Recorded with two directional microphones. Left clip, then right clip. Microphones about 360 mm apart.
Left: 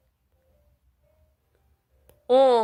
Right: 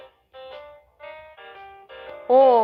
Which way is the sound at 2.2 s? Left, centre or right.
Centre.